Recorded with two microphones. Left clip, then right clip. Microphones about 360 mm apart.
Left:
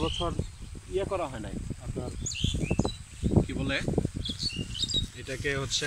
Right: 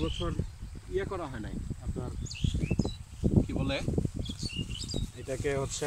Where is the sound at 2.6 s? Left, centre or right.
Left.